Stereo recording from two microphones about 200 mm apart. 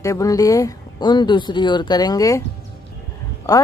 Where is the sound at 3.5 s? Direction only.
15° left (ahead or behind).